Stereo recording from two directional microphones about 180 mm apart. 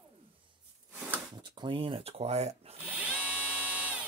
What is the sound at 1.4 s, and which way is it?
Speech, 25° right (ahead or behind).